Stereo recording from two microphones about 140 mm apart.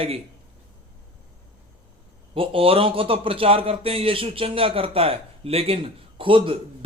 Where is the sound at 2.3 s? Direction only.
40° right (ahead or behind).